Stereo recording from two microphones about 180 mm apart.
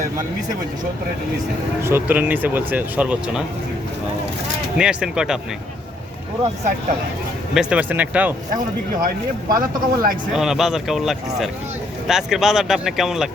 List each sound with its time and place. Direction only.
1.8 s speech: 10° right (ahead or behind)
4.8 s speech: 5° right (ahead or behind)
7.5 s speech: 5° right (ahead or behind)
8.9 s speech: 50° right (ahead or behind)
10.3 s speech: centre (ahead or behind)